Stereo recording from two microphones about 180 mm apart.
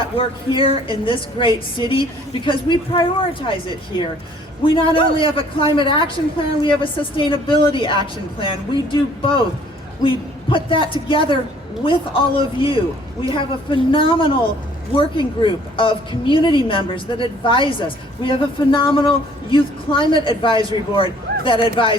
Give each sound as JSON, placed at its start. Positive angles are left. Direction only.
{"t": 0.0, "sound": "a woman's voice", "side_deg": 30}
{"t": 10.5, "sound": "a woman's voice", "side_deg": 30}